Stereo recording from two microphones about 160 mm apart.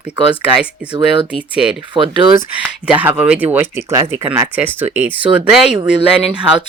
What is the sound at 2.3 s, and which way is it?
Speech, 10° right (ahead or behind).